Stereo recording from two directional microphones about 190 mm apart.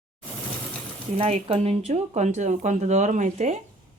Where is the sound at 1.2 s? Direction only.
30° right (ahead or behind).